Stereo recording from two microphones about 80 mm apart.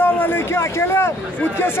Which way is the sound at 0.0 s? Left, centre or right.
Left.